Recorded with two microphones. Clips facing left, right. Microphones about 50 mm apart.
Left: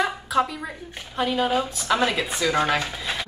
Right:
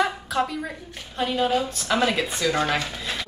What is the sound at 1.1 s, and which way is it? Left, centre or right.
A woman's voice, centre.